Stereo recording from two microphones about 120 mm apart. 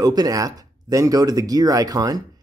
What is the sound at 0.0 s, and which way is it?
Speech, 30° right (ahead or behind).